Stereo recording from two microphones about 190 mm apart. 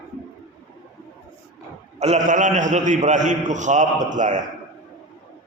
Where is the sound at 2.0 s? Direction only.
35° right (ahead or behind).